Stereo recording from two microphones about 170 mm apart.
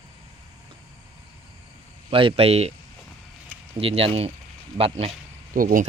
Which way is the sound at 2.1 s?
30° right (ahead or behind).